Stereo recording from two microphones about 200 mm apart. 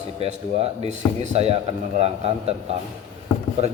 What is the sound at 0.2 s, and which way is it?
A man's voice, 30° right (ahead or behind).